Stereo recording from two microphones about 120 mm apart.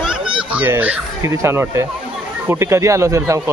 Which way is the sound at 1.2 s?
25° right (ahead or behind).